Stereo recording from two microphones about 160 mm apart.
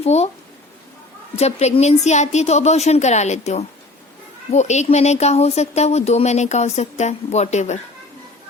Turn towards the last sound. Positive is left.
turn(degrees=45)  # may be behind; listen again after turning